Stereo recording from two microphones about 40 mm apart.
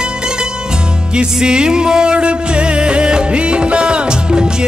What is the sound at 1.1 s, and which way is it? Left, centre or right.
Music, right.